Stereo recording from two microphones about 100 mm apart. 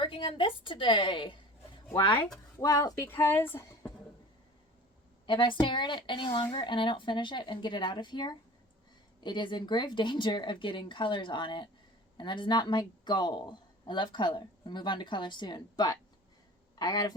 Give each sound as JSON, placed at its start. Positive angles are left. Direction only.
{"t": 0.0, "sound": "a woman's voice", "side_deg": 60}
{"t": 2.6, "sound": "speech", "side_deg": 40}
{"t": 3.1, "sound": "speech", "side_deg": 25}
{"t": 5.2, "sound": "a woman's voice", "side_deg": 55}